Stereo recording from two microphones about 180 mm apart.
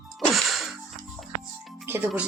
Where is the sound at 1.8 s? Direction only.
10° right (ahead or behind).